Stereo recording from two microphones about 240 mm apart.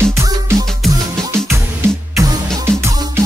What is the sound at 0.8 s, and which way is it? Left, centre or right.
Music, centre.